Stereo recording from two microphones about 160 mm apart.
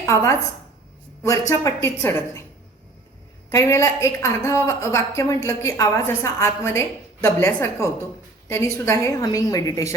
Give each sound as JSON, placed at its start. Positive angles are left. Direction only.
{"t": 0.0, "sound": "a woman's voice", "side_deg": 20}
{"t": 3.5, "sound": "a woman's voice", "side_deg": 20}